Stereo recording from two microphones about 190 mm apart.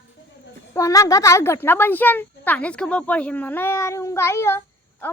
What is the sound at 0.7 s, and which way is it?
A woman's voice, 15° left (ahead or behind).